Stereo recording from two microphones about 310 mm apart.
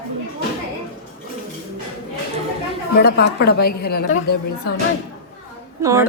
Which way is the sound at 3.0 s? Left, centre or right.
Left.